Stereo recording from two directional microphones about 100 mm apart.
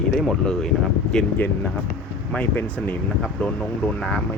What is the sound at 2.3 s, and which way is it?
Speech, 15° left (ahead or behind).